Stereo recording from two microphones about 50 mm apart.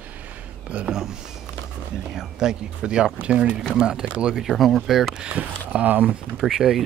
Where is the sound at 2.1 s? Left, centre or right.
Centre.